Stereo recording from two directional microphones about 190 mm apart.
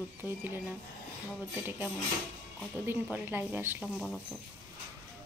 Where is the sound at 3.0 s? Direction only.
5° right (ahead or behind).